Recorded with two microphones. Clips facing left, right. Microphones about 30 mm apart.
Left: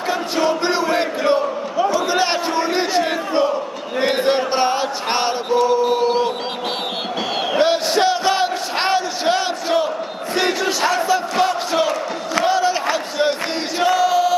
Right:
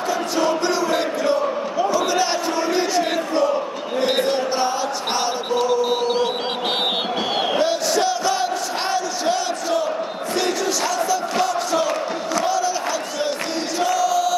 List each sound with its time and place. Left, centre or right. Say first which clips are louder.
0.1 s music: left 2 dB; left
2.0 s crowd: left 1 dB; left
4.0 s a sound: left 3 dB; left
7.5 s a sound: left 5 dB; left
10.3 s crowd: left 3 dB; left
13.7 s choir: left 4 dB; left